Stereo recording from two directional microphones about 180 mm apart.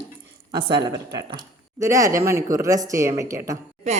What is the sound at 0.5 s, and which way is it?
A woman's voice, 25° right (ahead or behind).